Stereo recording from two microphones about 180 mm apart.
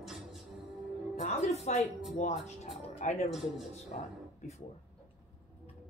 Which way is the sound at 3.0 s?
45° left (ahead or behind).